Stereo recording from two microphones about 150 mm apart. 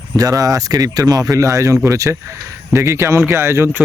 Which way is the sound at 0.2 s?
25° right (ahead or behind).